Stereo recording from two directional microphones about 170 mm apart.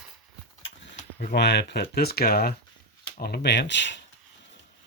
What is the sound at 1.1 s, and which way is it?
Speech, 75° left (ahead or behind).